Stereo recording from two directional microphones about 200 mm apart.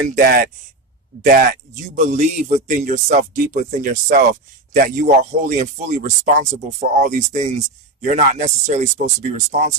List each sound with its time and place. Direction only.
0.2 s speech: 45° right (ahead or behind)